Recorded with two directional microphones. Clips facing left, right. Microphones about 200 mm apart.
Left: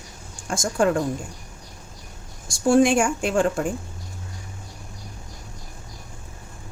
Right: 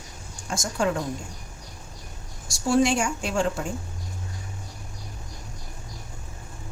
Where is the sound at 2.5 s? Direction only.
50° left (ahead or behind).